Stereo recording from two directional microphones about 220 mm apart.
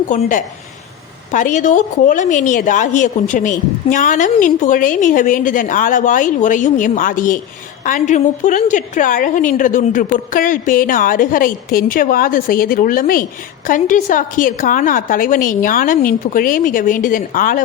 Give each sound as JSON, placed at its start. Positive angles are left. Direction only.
{"t": 0.1, "sound": "a woman's voice", "side_deg": 35}